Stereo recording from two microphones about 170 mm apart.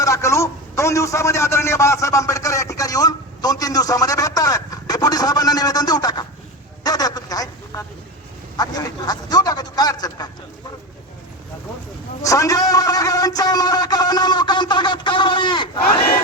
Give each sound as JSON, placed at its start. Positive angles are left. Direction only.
{"t": 0.0, "sound": "a man's voice", "side_deg": 20}
{"t": 6.8, "sound": "a sound", "side_deg": 20}
{"t": 8.5, "sound": "a man's voice", "side_deg": 20}
{"t": 12.2, "sound": "a man's voice", "side_deg": 20}